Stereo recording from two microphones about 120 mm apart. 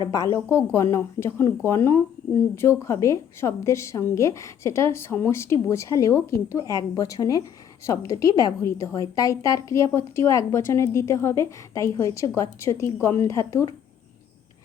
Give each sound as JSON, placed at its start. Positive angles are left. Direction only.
{"t": 0.0, "sound": "speech", "side_deg": 25}